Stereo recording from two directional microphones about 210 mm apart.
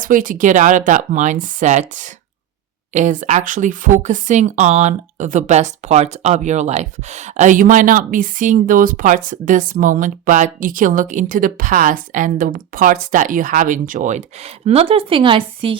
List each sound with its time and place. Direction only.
0.0 s speech: 40° right (ahead or behind); by 15.8 s 25° right (ahead or behind)